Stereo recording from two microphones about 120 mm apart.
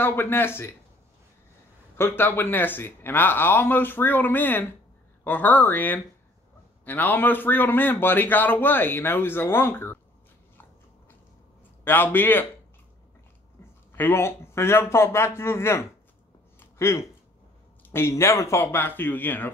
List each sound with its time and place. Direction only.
0.0 s a man's voice: 20° left (ahead or behind)
2.0 s a man's voice: 20° left (ahead or behind)
11.8 s a man's voice: 15° left (ahead or behind)
13.9 s a man's voice: 20° left (ahead or behind)
16.5 s a sound: 20° left (ahead or behind)
17.9 s a man's voice: 20° left (ahead or behind)